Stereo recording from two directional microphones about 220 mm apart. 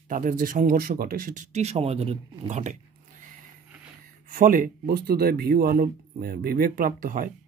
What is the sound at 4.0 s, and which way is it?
Speech, 40° right (ahead or behind).